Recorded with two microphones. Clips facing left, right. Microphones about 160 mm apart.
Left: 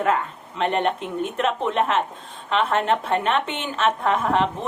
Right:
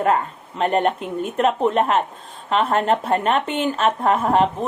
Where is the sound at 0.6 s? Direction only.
40° right (ahead or behind).